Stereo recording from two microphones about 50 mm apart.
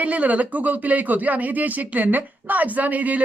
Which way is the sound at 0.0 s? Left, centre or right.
Right.